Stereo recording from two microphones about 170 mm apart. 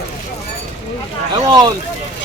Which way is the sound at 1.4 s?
20° right (ahead or behind).